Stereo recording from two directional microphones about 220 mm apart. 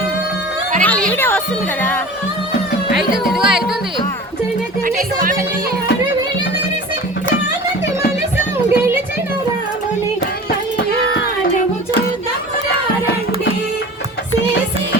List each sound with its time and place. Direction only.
0.8 s music: 5° left (ahead or behind)
2.9 s music: centre (ahead or behind)
4.9 s music: 40° right (ahead or behind)
8.7 s music: 10° right (ahead or behind)